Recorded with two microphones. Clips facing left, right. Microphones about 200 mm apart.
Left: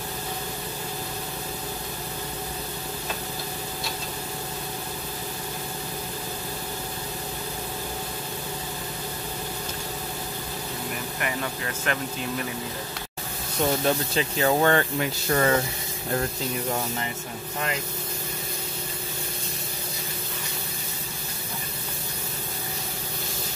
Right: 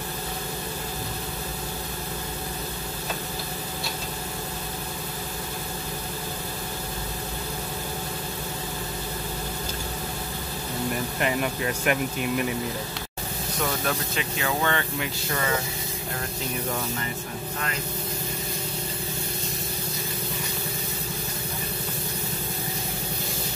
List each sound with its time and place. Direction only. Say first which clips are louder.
11.1 s speech: right 4 dB; 20° right (ahead or behind)
13.8 s speech: left 4 dB; 35° left (ahead or behind)